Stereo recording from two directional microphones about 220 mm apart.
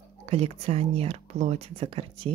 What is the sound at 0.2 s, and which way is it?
A woman's voice, 30° right (ahead or behind).